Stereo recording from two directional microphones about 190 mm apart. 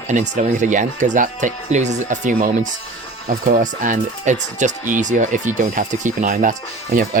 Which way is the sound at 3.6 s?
40° right (ahead or behind).